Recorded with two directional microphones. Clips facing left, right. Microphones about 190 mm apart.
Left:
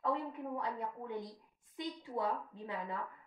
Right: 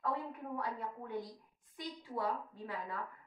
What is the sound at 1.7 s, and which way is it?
Speech, 20° left (ahead or behind).